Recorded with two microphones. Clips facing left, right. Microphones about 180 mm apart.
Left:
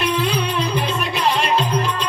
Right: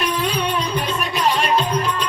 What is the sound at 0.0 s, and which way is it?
Music, 30° left (ahead or behind).